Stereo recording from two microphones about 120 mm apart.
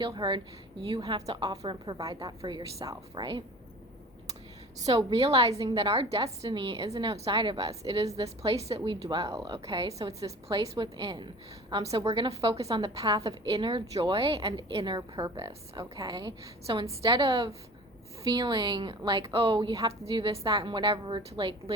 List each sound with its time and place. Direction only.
0.0 s a woman's voice: 40° right (ahead or behind)
2.0 s a woman's voice: 30° right (ahead or behind)
4.9 s a woman's voice: 35° right (ahead or behind)
5.1 s a woman's voice: 55° right (ahead or behind)
5.5 s a woman's voice: 30° right (ahead or behind)
5.7 s a woman's voice: 45° right (ahead or behind)
6.5 s a woman's voice: 40° right (ahead or behind)
6.8 s a woman's voice: 30° right (ahead or behind)
9.6 s a woman's voice: 45° right (ahead or behind)
10.1 s a woman's voice: 30° right (ahead or behind)
12.0 s a woman's voice: 50° right (ahead or behind)
12.5 s a woman's voice: 35° right (ahead or behind)
16.6 s a woman's voice: 50° right (ahead or behind)